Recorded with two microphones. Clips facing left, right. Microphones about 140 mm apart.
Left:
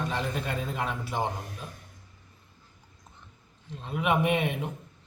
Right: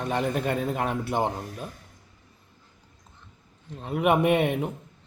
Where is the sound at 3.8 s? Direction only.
50° right (ahead or behind).